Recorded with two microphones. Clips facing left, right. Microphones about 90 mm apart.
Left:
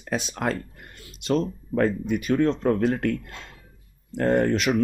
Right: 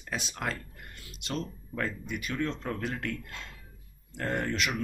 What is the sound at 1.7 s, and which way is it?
Speech, 45° left (ahead or behind).